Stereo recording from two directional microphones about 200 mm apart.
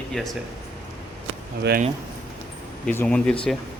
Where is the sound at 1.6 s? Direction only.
55° right (ahead or behind).